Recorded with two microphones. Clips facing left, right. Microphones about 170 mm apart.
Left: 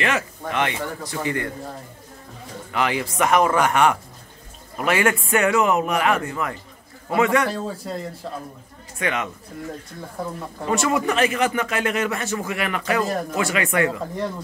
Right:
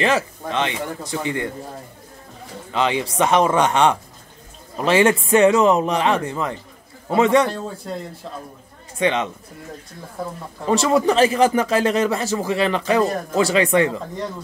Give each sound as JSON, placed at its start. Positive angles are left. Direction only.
{"t": 0.0, "sound": "speech", "side_deg": -25}
{"t": 2.7, "sound": "speech", "side_deg": -25}
{"t": 7.4, "sound": "a man's voice", "side_deg": 0}
{"t": 9.0, "sound": "speech", "side_deg": -25}
{"t": 10.7, "sound": "speech", "side_deg": -30}